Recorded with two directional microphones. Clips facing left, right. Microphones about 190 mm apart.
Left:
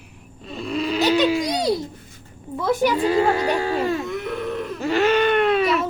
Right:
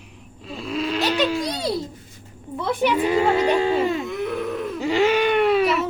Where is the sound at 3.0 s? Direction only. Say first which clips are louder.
Right 2 dB; 15° right (ahead or behind).